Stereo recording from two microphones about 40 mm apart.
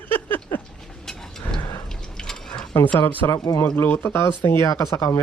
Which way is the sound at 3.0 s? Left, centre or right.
Left.